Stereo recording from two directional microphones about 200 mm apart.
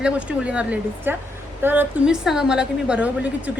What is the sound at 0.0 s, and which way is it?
A woman's voice, 5° right (ahead or behind).